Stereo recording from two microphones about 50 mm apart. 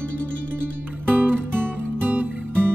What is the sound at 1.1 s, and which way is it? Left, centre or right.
Music, right.